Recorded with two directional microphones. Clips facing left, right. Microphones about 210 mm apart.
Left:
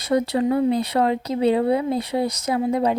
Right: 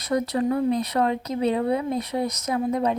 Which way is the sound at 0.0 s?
30° left (ahead or behind).